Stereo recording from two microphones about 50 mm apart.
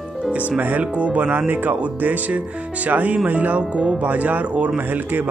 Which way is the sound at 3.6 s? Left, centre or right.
Centre.